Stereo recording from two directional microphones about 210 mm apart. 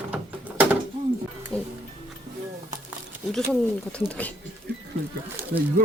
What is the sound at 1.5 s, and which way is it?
Music, 5° left (ahead or behind).